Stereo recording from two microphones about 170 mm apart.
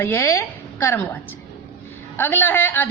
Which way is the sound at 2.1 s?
10° left (ahead or behind).